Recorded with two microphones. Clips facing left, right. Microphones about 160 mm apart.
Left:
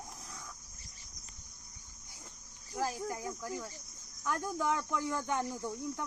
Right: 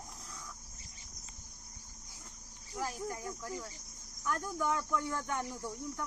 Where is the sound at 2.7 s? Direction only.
25° left (ahead or behind).